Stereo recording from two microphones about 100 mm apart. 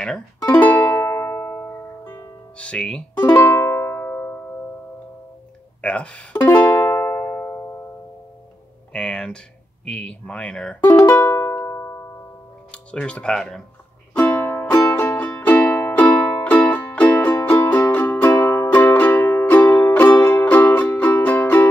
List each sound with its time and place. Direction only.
0.5 s music: 15° left (ahead or behind)
2.5 s speech: 10° left (ahead or behind)
3.2 s music: 25° left (ahead or behind)
5.8 s speech: 10° left (ahead or behind)
6.4 s music: 20° left (ahead or behind)
8.9 s a sound: 5° left (ahead or behind)
9.8 s speech: 10° left (ahead or behind)
11.0 s music: 30° left (ahead or behind)
12.7 s speech: 10° left (ahead or behind)
14.2 s music: 25° left (ahead or behind)